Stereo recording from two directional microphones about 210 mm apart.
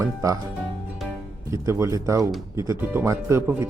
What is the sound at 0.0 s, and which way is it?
Speech, 15° right (ahead or behind).